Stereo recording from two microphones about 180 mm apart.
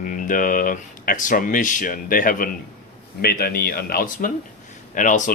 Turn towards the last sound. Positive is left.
turn(degrees=45)  # may be behind; listen again after turning